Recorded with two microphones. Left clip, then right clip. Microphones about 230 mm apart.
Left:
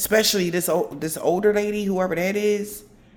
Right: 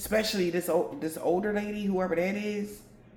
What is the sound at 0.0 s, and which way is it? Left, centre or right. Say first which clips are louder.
A man's voice: left 8 dB; left.